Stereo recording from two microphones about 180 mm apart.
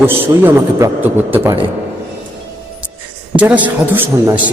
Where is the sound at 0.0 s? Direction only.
10° right (ahead or behind).